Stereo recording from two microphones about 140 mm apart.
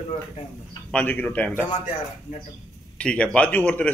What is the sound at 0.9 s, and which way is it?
Speech, 10° left (ahead or behind).